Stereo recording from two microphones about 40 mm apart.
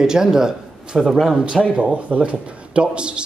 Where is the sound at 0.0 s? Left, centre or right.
Centre.